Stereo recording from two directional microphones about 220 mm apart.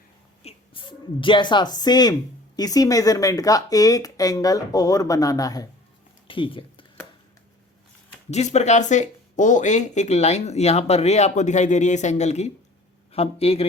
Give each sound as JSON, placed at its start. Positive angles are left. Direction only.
{"t": 0.4, "sound": "speech", "side_deg": 25}
{"t": 6.2, "sound": "a sound", "side_deg": 25}
{"t": 8.3, "sound": "speech", "side_deg": 30}